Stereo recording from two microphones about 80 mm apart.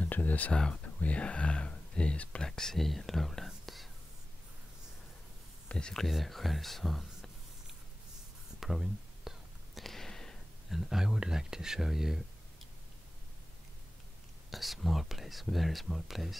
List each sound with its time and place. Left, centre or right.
0.0 s speech: left; by 3.9 s centre
5.7 s speech: centre
8.5 s a sound: centre
14.5 s speech: centre